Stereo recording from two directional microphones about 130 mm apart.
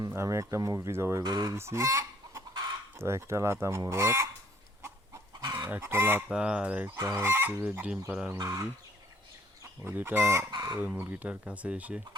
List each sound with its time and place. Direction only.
0.1 s speech: 20° right (ahead or behind)
1.2 s speech: 30° right (ahead or behind)
1.5 s speech: 20° right (ahead or behind)
5.4 s chicken: 30° right (ahead or behind)
5.7 s chicken: 20° right (ahead or behind)
6.8 s chicken: 20° right (ahead or behind)
8.3 s speech: 25° right (ahead or behind)
9.8 s chicken: 15° right (ahead or behind)
10.5 s chicken: 30° right (ahead or behind)
10.8 s chicken: 15° right (ahead or behind)